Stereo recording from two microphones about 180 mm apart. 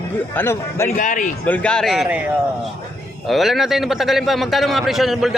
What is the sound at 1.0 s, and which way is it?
Speech, 45° left (ahead or behind).